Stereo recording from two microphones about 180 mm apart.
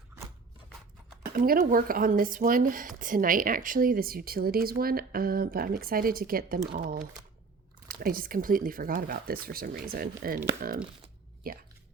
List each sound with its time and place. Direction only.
1.3 s speech: 50° right (ahead or behind)